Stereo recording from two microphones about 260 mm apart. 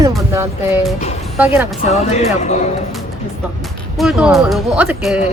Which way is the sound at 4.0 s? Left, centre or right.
Centre.